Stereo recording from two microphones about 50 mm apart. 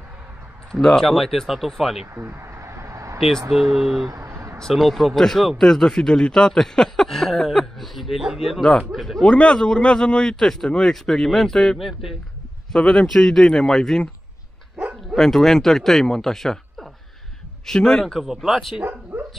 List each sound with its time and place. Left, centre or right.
0.7 s speech: centre
2.1 s a sound: right
3.2 s speech: centre
4.2 s a sound: right
4.7 s speech: centre
9.2 s speech: centre
15.1 s speech: centre
18.0 s speech: centre